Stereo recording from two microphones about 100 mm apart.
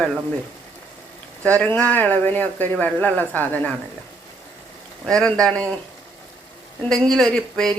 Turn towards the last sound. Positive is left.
turn(degrees=5)  # may be behind; listen again after turning